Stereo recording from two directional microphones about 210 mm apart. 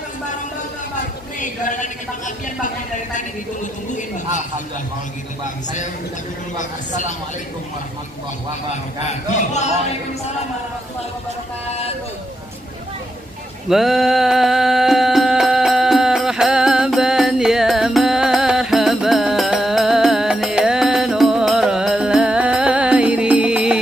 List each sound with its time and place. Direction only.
1.4 s a woman's voice: 35° left (ahead or behind)
6.6 s a woman's voice: 35° left (ahead or behind)
9.0 s a woman's voice: 35° left (ahead or behind)
13.7 s music: centre (ahead or behind)